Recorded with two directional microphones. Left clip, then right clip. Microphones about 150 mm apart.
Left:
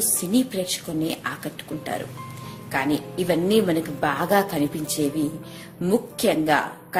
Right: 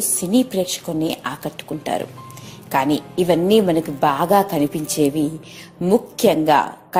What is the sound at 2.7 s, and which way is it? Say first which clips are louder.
A woman's voice: right 6 dB; 40° right (ahead or behind).